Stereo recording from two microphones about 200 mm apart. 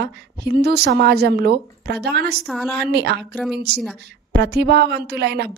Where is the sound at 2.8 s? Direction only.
55° right (ahead or behind).